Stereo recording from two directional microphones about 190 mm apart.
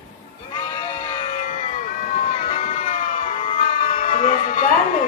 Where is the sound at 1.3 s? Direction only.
40° left (ahead or behind).